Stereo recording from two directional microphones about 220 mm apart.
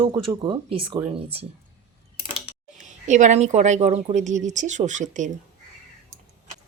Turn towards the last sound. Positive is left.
turn(degrees=-35)  # may be behind; listen again after turning